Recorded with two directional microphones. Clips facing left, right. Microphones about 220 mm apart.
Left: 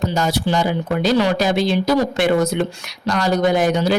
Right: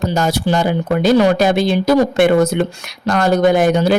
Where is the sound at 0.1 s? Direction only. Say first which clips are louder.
Right 3 dB; 45° right (ahead or behind).